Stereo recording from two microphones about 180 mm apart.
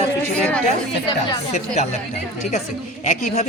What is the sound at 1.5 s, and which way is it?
Speech, 40° left (ahead or behind).